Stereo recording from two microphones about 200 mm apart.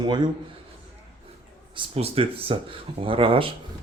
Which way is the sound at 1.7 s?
30° right (ahead or behind).